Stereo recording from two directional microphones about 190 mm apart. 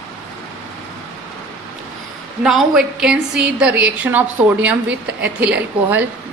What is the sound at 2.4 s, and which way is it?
A woman's voice, centre (ahead or behind).